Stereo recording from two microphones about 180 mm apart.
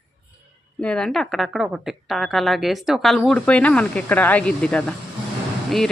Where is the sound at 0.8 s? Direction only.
5° left (ahead or behind).